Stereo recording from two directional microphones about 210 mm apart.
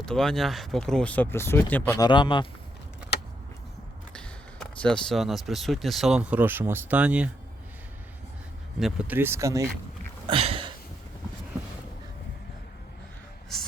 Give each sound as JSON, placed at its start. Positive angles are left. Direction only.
{"t": 0.0, "sound": "speech", "side_deg": 5}
{"t": 2.0, "sound": "speech", "side_deg": 25}
{"t": 4.1, "sound": "speech", "side_deg": 5}
{"t": 8.8, "sound": "speech", "side_deg": -5}
{"t": 10.2, "sound": "a sound", "side_deg": -25}